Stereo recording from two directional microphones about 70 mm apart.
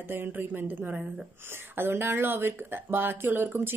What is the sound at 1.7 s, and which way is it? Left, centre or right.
A woman's voice, right.